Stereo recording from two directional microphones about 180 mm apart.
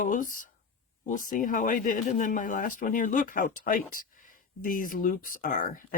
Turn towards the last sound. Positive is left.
turn(degrees=50)  # may be behind; listen again after turning